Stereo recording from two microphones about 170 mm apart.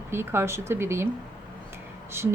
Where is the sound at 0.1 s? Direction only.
15° right (ahead or behind).